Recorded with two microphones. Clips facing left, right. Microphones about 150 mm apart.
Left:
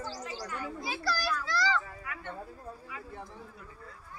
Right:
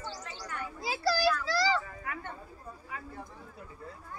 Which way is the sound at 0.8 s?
30° right (ahead or behind).